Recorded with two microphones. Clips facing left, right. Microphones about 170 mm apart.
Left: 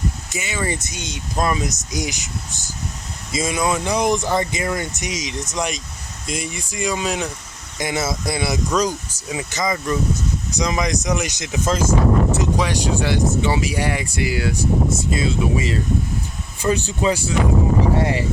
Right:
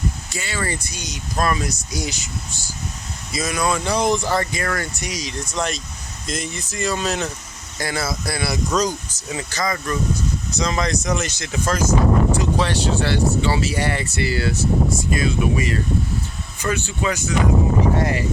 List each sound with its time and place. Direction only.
0.3 s speech: 20° left (ahead or behind)
8.7 s speech: 10° left (ahead or behind)
9.5 s speech: 20° left (ahead or behind)
12.5 s speech: 10° left (ahead or behind)
14.8 s speech: 25° left (ahead or behind)
16.7 s speech: 35° left (ahead or behind)